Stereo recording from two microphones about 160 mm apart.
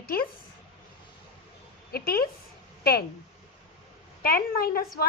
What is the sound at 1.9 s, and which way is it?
A woman's voice, 70° left (ahead or behind).